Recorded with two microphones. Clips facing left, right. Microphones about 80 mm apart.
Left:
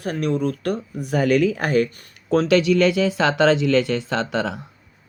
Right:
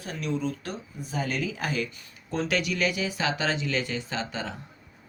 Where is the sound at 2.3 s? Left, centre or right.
Left.